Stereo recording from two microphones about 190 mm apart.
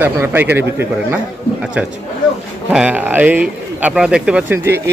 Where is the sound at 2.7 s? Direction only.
5° right (ahead or behind).